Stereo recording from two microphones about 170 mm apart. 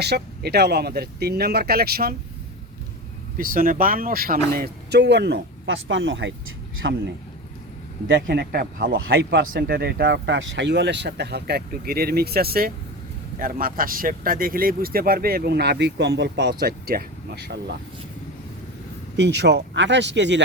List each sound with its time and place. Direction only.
0.0 s speech: 75° right (ahead or behind)
3.3 s speech: 55° right (ahead or behind); by 7.0 s 90° right
8.0 s speech: 85° right
9.5 s speech: 65° right (ahead or behind)
19.1 s speech: 90° right